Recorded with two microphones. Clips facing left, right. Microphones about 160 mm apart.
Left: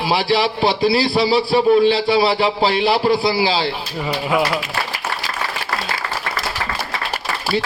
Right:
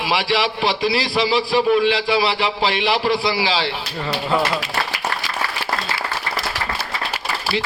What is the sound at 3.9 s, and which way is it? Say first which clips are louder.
Speech: left 1 dB; 10° left (ahead or behind).